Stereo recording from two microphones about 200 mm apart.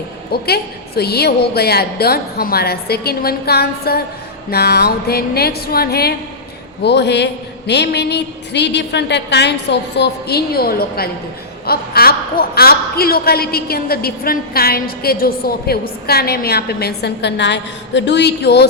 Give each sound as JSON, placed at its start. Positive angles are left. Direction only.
{"t": 0.4, "sound": "a man's voice", "side_deg": 50}